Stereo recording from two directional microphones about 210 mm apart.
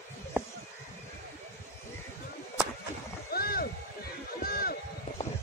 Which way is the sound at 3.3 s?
45° left (ahead or behind).